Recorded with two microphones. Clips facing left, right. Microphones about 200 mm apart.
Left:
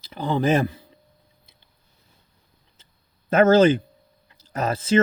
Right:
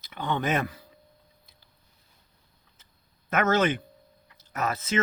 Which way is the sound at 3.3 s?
30° left (ahead or behind).